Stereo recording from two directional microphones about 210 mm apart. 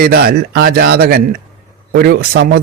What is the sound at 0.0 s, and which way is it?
Speech, 45° right (ahead or behind).